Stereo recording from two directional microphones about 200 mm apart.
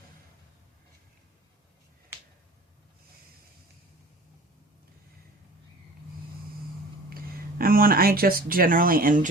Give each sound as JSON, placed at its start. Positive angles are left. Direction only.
{"t": 7.1, "sound": "speech", "side_deg": -45}